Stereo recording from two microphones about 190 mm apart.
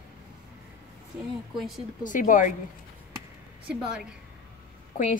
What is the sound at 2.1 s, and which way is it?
Speech, 45° left (ahead or behind).